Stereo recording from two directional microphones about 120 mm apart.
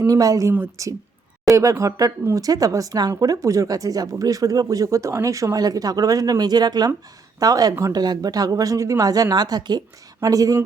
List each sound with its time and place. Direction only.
0.0 s speech: 30° right (ahead or behind)